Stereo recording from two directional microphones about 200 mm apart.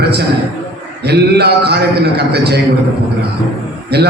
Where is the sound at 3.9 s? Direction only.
55° right (ahead or behind).